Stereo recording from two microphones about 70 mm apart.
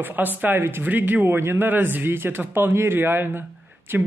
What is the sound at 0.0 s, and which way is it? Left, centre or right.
Speech, right.